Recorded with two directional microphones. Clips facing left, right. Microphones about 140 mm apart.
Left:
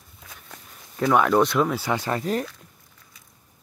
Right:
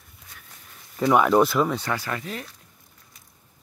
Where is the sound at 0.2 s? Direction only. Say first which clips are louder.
Left 5 dB; 90° left.